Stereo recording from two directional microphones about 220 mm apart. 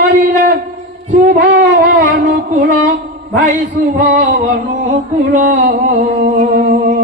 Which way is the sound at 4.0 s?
35° right (ahead or behind).